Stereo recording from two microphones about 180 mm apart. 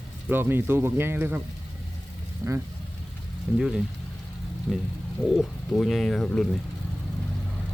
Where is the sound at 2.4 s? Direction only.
15° right (ahead or behind).